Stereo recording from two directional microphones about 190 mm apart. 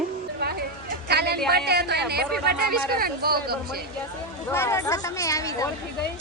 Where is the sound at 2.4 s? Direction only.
50° right (ahead or behind).